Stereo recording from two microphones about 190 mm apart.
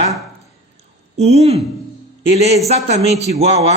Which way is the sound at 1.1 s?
35° right (ahead or behind).